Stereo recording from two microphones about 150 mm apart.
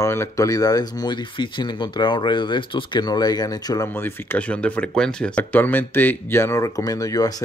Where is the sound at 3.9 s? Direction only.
10° left (ahead or behind).